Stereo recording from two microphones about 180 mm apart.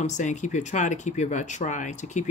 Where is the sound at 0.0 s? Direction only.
40° left (ahead or behind).